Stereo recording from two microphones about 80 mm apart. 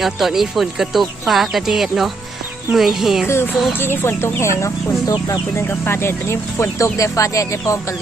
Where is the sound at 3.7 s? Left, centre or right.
Left.